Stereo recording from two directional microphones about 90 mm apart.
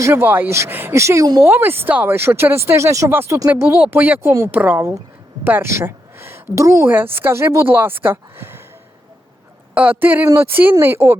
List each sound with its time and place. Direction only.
0.0 s a woman's voice: 25° right (ahead or behind)
6.9 s speech: 25° right (ahead or behind)
9.7 s speech: 20° right (ahead or behind)
10.2 s speech: 35° right (ahead or behind)
10.5 s speech: 25° right (ahead or behind)